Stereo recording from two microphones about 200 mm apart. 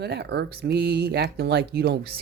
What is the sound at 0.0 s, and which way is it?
Speech, 55° right (ahead or behind).